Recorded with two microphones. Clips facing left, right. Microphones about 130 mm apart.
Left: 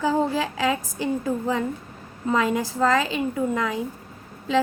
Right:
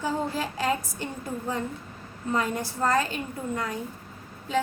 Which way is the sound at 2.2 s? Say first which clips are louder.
Left 5 dB; 90° left.